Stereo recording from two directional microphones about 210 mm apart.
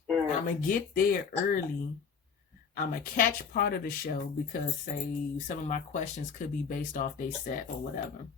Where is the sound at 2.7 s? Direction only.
40° left (ahead or behind).